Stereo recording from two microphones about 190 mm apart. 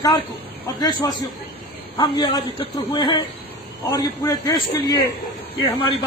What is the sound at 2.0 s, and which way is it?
A man's voice, 25° left (ahead or behind).